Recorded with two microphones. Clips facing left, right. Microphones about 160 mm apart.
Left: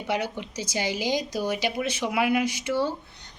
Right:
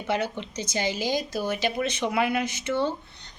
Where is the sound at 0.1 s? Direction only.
15° left (ahead or behind).